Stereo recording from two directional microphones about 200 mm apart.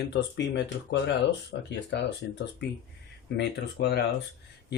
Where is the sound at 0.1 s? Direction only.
60° left (ahead or behind).